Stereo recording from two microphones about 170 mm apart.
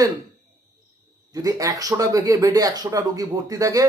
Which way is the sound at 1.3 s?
20° right (ahead or behind).